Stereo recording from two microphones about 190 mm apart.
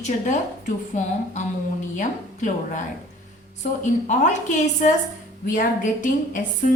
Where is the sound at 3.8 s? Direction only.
40° left (ahead or behind).